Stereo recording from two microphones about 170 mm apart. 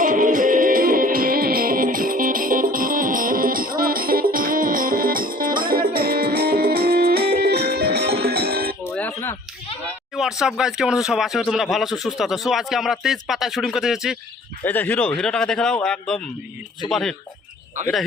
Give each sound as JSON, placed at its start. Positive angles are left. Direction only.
{"t": 0.0, "sound": "music", "side_deg": -50}
{"t": 9.0, "sound": "a sound", "side_deg": 10}
{"t": 10.2, "sound": "speech", "side_deg": 0}
{"t": 14.6, "sound": "speech", "side_deg": 10}